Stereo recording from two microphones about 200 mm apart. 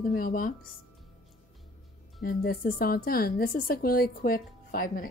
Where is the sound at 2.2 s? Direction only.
50° left (ahead or behind).